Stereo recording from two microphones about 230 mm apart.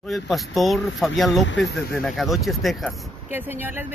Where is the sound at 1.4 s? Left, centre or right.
Left.